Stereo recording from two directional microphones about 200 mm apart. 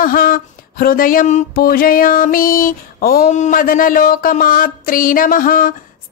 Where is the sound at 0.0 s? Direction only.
45° left (ahead or behind).